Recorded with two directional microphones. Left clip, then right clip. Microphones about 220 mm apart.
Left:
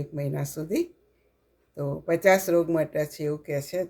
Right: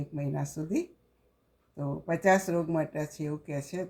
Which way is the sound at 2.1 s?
40° left (ahead or behind).